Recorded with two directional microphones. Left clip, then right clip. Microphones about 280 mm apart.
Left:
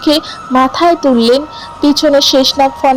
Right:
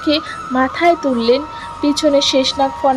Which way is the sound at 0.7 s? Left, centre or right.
Centre.